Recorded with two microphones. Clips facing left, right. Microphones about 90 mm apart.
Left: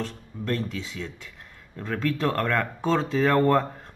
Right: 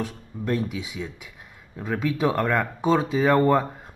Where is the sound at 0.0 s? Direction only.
10° right (ahead or behind).